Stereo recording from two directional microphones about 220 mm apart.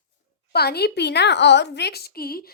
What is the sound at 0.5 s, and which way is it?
A woman's voice, 45° left (ahead or behind).